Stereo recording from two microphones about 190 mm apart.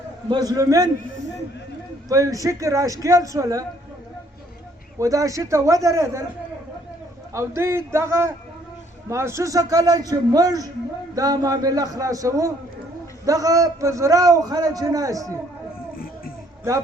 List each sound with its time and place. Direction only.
0.3 s a man's voice: 20° right (ahead or behind)
2.0 s a man's voice: 15° right (ahead or behind)
4.9 s a man's voice: 15° right (ahead or behind)
7.3 s a man's voice: 15° right (ahead or behind)